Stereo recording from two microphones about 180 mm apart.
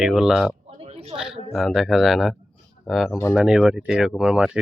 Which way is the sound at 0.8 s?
35° right (ahead or behind).